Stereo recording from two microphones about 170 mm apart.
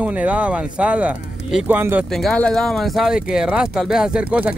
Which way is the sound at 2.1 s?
5° left (ahead or behind).